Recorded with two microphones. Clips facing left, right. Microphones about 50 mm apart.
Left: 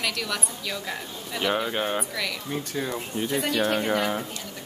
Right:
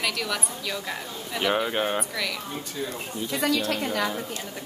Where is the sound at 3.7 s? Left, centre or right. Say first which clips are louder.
Left 2 dB; left.